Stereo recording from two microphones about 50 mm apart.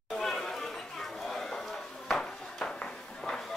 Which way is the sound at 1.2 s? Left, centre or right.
Centre.